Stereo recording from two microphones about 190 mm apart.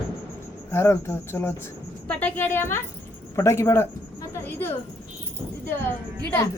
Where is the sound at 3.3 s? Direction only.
15° left (ahead or behind).